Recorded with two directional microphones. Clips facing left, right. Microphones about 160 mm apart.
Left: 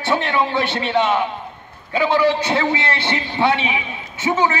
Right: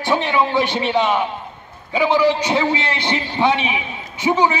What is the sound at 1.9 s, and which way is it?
A man's voice, 15° right (ahead or behind).